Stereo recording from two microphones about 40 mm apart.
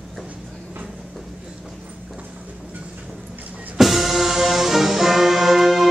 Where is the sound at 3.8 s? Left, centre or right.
Centre.